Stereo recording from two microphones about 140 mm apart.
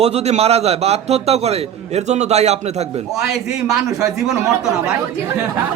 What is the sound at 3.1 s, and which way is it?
Speech, centre (ahead or behind).